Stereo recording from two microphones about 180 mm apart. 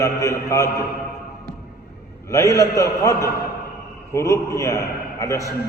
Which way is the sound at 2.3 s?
20° left (ahead or behind).